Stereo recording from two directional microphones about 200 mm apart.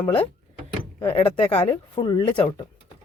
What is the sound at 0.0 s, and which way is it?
Speech, 25° left (ahead or behind).